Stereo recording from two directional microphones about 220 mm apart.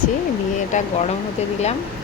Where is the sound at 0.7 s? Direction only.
35° left (ahead or behind).